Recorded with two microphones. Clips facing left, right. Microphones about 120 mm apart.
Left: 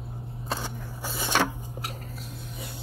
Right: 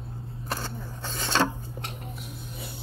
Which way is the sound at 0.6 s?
10° left (ahead or behind).